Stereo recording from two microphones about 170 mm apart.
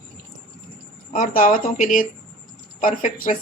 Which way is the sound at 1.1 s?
55° left (ahead or behind).